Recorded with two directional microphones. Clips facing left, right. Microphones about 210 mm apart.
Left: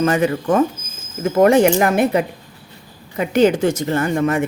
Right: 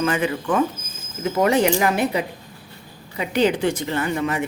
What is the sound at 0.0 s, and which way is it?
Speech, 40° left (ahead or behind).